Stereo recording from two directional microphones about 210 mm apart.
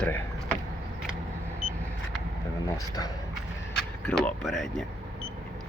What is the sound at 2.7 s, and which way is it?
Speech, 15° left (ahead or behind).